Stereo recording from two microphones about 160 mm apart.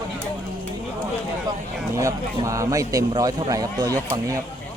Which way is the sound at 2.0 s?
20° right (ahead or behind).